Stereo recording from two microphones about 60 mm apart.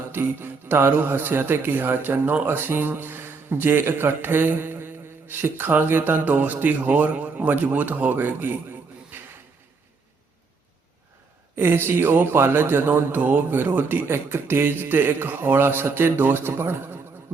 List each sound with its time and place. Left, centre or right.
0.1 s speech: right
11.5 s speech: right